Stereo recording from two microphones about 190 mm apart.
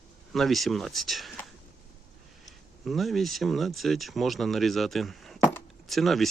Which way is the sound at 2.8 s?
Centre (ahead or behind).